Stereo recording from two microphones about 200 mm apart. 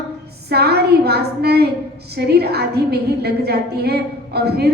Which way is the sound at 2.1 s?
55° right (ahead or behind).